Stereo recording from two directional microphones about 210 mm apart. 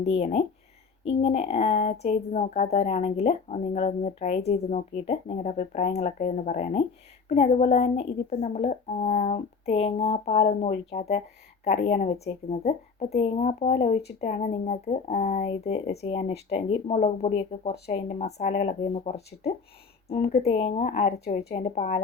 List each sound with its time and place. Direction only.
0.0 s a woman's voice: 30° left (ahead or behind)